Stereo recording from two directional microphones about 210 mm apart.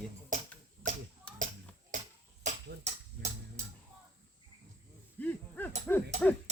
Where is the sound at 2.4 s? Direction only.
35° right (ahead or behind).